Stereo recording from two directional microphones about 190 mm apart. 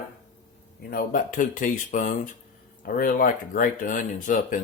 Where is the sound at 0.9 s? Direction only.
45° left (ahead or behind).